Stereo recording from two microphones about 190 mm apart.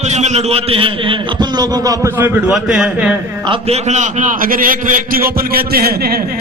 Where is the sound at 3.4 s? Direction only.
35° right (ahead or behind).